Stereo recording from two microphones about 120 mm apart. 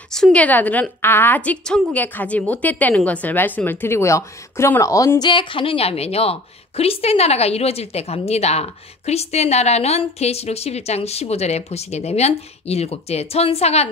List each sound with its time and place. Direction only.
0.1 s a woman's voice: 5° left (ahead or behind); by 5.3 s 25° left (ahead or behind)
5.3 s a woman's voice: 45° left (ahead or behind); by 13.8 s 60° left (ahead or behind)